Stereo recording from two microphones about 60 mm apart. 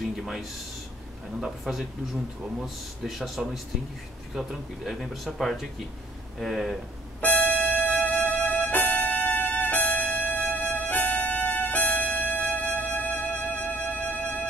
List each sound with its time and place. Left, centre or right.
0.0 s a sound: centre
1.6 s speech: centre
7.2 s music: left